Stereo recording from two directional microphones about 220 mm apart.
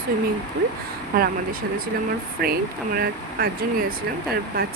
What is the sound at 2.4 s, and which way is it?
Speech, 45° right (ahead or behind).